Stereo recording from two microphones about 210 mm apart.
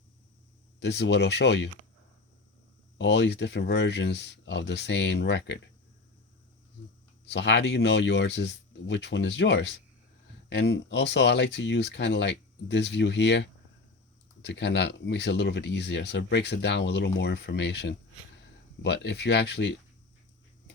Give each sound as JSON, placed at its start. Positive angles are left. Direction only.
{"t": 0.8, "sound": "speech", "side_deg": 55}
{"t": 3.0, "sound": "speech", "side_deg": 55}
{"t": 7.3, "sound": "speech", "side_deg": 55}